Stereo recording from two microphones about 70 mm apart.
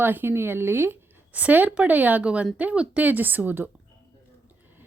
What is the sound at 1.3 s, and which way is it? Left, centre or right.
Speech, right.